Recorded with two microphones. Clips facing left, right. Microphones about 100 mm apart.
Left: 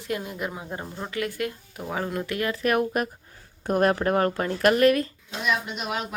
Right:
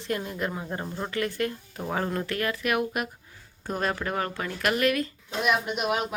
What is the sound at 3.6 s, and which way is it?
Speech, 55° left (ahead or behind).